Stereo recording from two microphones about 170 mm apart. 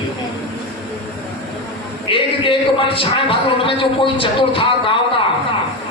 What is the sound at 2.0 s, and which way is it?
A man's voice, 30° left (ahead or behind).